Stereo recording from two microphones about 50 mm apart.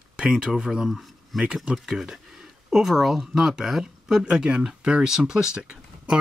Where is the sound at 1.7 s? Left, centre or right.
Centre.